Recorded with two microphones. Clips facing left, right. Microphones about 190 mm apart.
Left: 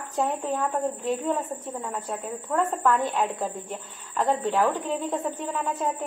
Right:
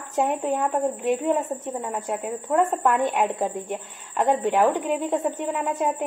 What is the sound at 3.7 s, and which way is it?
A woman's voice, 10° right (ahead or behind).